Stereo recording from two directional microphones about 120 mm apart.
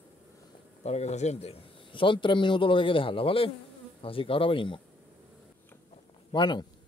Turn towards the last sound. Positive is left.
turn(degrees=40)  # may be behind; listen again after turning